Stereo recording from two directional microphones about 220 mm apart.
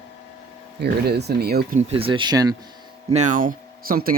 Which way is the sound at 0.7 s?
50° right (ahead or behind).